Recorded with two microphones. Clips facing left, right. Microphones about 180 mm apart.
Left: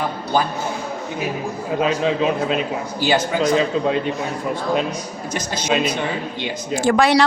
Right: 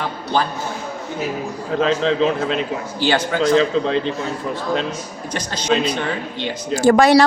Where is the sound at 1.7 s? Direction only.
10° left (ahead or behind).